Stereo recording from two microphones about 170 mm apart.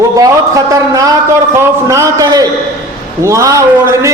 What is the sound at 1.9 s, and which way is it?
A man's voice, 20° right (ahead or behind).